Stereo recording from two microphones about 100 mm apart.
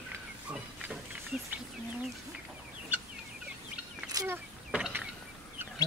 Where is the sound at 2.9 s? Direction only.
20° right (ahead or behind).